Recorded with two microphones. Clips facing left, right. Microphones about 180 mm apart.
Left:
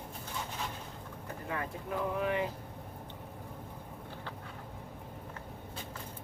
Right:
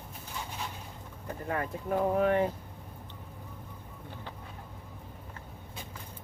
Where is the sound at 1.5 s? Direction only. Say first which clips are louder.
Right 6 dB; 45° right (ahead or behind).